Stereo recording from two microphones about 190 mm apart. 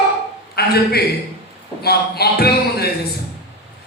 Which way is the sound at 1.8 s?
55° left (ahead or behind).